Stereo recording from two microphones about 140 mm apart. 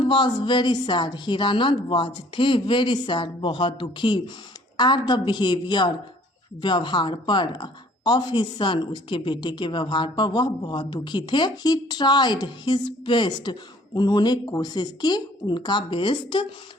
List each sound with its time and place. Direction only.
0.0 s speech: 35° left (ahead or behind)